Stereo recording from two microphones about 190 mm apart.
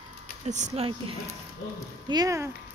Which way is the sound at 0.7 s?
30° right (ahead or behind).